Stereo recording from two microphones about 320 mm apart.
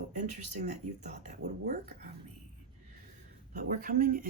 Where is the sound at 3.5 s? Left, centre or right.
Right.